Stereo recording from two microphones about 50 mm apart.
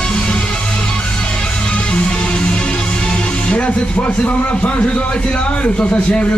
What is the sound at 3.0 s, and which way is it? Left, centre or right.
A man's voice, left.